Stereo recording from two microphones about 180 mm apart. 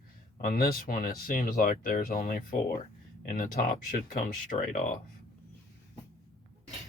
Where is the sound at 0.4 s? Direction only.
60° left (ahead or behind); by 4.9 s 40° left (ahead or behind).